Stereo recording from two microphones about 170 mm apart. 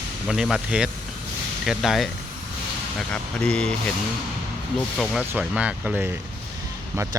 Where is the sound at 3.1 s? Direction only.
5° left (ahead or behind).